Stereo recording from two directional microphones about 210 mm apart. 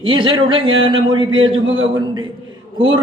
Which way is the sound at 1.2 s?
70° right (ahead or behind).